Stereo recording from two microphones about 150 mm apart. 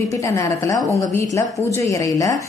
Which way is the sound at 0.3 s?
20° left (ahead or behind).